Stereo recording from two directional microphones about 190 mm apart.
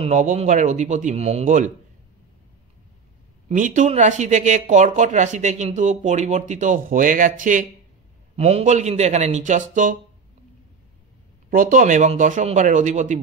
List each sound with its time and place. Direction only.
0.0 s speech: 40° right (ahead or behind)
3.4 s speech: 40° right (ahead or behind)
11.5 s speech: 45° right (ahead or behind)